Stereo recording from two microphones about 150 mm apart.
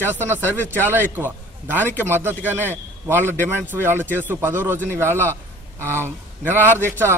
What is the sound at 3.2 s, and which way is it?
Speech, 10° left (ahead or behind).